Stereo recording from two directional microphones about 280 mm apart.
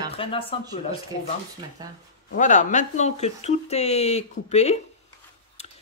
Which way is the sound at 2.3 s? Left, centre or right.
Left.